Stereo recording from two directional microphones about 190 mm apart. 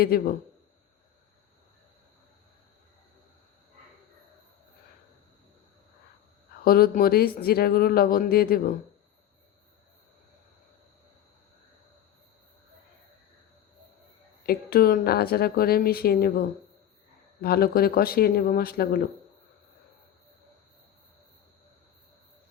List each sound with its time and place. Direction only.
0.0 s speech: 50° left (ahead or behind)
6.7 s speech: 50° left (ahead or behind)
14.4 s speech: 50° left (ahead or behind)